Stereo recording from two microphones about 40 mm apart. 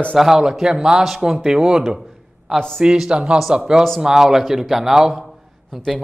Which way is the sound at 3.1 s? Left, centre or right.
Right.